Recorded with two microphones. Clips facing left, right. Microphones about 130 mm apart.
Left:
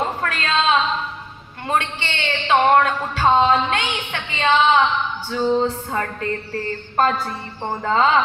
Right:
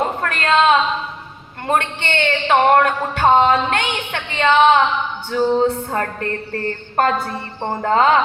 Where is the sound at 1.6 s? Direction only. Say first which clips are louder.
Right 3 dB; 55° right (ahead or behind).